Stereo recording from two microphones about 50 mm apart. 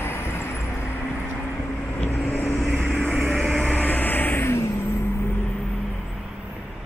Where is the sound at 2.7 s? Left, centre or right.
Left.